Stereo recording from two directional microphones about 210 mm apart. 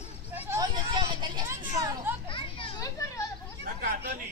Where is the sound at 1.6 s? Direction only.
10° right (ahead or behind).